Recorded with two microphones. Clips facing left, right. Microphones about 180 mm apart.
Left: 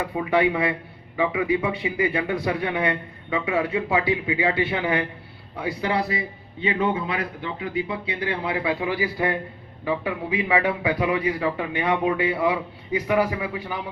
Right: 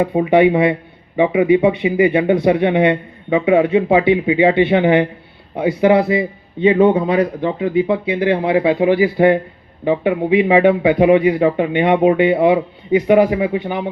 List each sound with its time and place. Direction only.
0.0 s a man's voice: 30° right (ahead or behind)
6.7 s a man's voice: 40° right (ahead or behind); by 13.9 s 25° right (ahead or behind)